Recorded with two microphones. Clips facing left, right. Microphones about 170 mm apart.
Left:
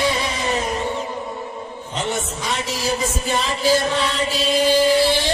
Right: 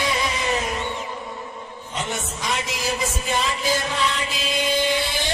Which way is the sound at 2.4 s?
35° left (ahead or behind).